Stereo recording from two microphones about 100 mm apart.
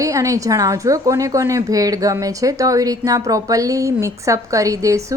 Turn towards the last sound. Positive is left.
turn(degrees=-35)  # may be behind; listen again after turning